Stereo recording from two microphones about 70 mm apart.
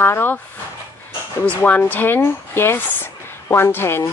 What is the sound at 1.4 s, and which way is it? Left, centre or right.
Speech, left.